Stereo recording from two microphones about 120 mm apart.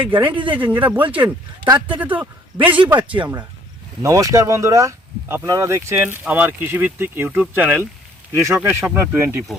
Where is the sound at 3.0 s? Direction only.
45° right (ahead or behind).